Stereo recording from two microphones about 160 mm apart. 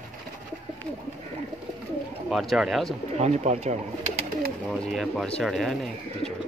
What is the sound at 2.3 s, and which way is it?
Speech, centre (ahead or behind).